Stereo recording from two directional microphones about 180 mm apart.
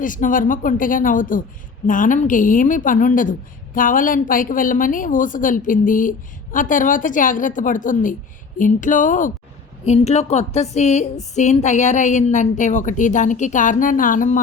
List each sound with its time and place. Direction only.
0.0 s a woman's voice: 50° left (ahead or behind)